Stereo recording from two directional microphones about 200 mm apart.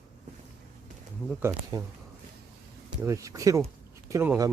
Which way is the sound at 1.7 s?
20° right (ahead or behind).